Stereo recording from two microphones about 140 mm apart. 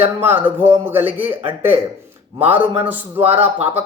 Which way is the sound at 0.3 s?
15° right (ahead or behind).